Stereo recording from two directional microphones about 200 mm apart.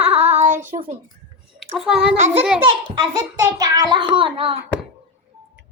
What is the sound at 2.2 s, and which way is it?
Speech, 35° right (ahead or behind).